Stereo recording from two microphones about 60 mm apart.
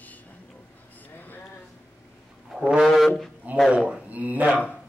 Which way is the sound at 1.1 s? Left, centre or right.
Left.